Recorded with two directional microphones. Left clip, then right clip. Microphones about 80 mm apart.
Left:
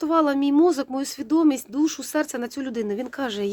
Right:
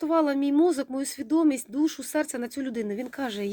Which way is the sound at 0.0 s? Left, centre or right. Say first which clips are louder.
Left 3 dB; left.